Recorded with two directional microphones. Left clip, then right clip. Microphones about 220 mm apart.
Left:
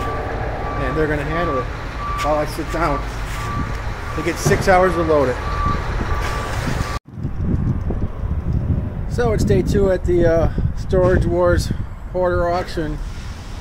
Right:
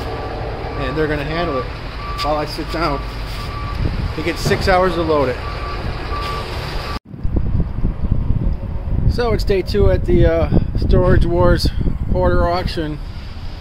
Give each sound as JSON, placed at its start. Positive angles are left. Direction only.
{"t": 0.9, "sound": "speech", "side_deg": -5}
{"t": 2.7, "sound": "speech", "side_deg": 5}
{"t": 4.6, "sound": "speech", "side_deg": 0}
{"t": 9.1, "sound": "speech", "side_deg": -5}